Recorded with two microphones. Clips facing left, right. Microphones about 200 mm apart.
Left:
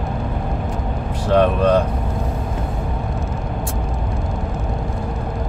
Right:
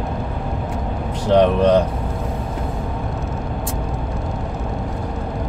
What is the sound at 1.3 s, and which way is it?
Speech, 20° right (ahead or behind).